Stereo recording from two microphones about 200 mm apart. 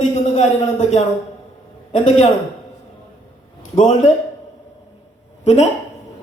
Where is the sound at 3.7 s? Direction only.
40° left (ahead or behind).